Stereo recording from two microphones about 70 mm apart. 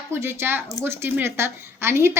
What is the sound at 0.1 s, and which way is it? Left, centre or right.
A woman's voice, right.